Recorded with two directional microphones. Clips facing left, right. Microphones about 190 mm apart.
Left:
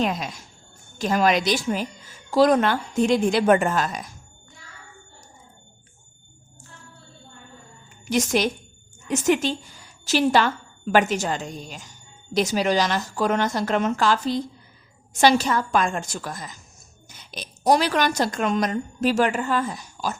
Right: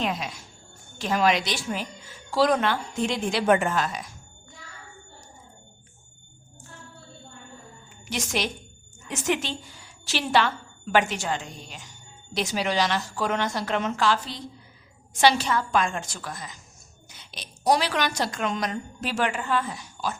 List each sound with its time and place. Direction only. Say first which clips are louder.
0.9 s a woman's voice: left 3 dB; 45° left (ahead or behind)
8.1 s a woman's voice: left 7 dB; 45° left (ahead or behind)